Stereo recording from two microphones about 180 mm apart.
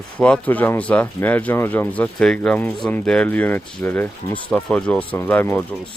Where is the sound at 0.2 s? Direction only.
10° left (ahead or behind).